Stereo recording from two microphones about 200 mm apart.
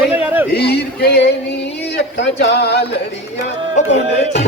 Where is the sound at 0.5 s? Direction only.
55° left (ahead or behind).